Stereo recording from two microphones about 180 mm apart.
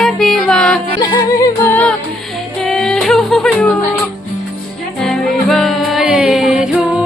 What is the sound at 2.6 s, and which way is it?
Music, 5° left (ahead or behind).